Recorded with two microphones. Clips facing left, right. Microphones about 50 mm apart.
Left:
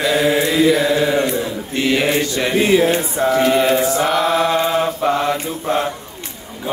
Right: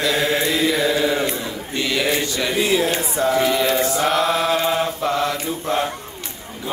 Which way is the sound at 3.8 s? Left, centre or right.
Centre.